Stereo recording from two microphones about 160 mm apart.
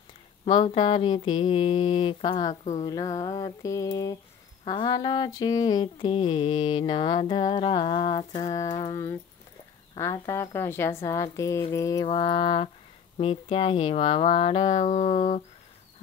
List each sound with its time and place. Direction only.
0.5 s speech: 35° left (ahead or behind)
2.8 s mantra: 25° left (ahead or behind)
8.8 s speech: 15° left (ahead or behind)
10.1 s mantra: 20° left (ahead or behind)
12.1 s speech: 30° left (ahead or behind)
15.1 s a sound: 50° left (ahead or behind)